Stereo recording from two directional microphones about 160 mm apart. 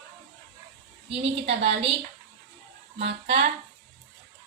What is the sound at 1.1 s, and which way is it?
Speech, 40° right (ahead or behind).